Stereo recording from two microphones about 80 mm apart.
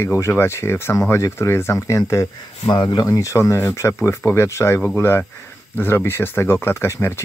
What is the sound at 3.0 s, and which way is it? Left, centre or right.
Speech, left.